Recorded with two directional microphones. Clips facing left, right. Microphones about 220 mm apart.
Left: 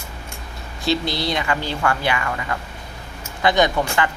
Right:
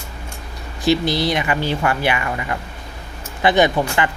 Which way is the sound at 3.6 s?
20° right (ahead or behind).